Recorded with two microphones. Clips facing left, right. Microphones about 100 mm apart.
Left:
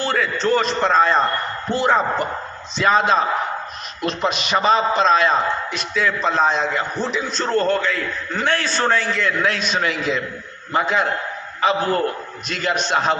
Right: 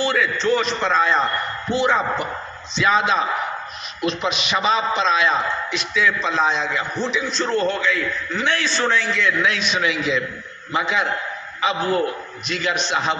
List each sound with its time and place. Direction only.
0.0 s a man's voice: 45° left (ahead or behind)